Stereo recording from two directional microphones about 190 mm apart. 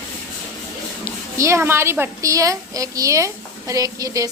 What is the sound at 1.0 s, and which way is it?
A woman's voice, 15° right (ahead or behind).